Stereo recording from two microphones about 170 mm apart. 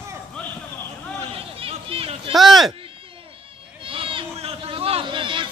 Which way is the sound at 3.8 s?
30° right (ahead or behind).